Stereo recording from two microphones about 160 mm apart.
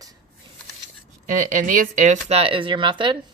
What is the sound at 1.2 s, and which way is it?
Speech, 50° right (ahead or behind).